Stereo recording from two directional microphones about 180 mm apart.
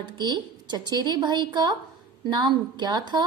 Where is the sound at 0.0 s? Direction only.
25° right (ahead or behind).